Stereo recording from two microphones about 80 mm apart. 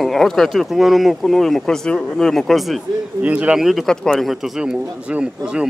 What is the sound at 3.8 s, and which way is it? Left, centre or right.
Speech, centre.